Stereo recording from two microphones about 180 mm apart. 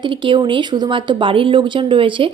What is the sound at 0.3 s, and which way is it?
Speech, 25° right (ahead or behind).